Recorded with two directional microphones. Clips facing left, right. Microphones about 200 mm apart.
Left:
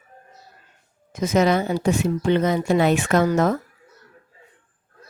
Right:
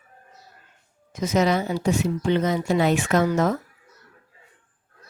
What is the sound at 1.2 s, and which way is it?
Speech, 55° left (ahead or behind).